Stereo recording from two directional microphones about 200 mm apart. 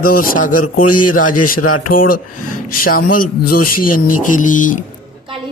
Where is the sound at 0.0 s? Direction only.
45° left (ahead or behind).